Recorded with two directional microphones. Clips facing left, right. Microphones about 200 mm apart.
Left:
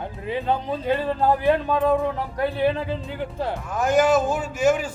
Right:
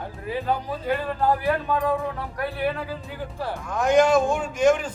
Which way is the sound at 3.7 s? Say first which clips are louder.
Right 1 dB; 5° left (ahead or behind).